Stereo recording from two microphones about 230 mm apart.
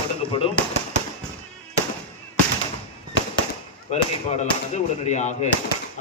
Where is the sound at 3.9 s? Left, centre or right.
Left.